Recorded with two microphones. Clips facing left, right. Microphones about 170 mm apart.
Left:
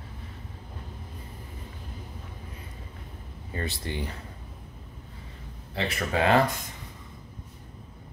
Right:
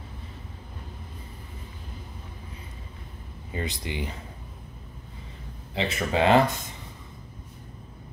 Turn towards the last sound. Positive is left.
turn(degrees=-25)  # may be behind; listen again after turning